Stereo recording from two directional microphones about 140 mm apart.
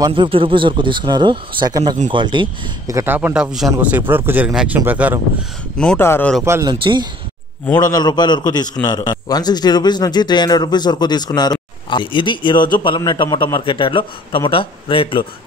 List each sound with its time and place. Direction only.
0.0 s speech: 35° right (ahead or behind)
2.9 s speech: 20° right (ahead or behind)
3.2 s speech: 10° right (ahead or behind)
4.5 s speech: 5° right (ahead or behind)
5.9 s speech: 15° left (ahead or behind)
6.4 s speech: 20° right (ahead or behind)
6.7 s speech: 35° right (ahead or behind)
7.7 s speech: 30° left (ahead or behind)